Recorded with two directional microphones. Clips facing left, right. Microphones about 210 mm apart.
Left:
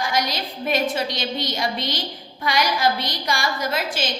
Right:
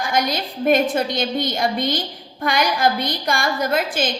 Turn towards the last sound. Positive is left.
turn(degrees=-50)  # may be behind; listen again after turning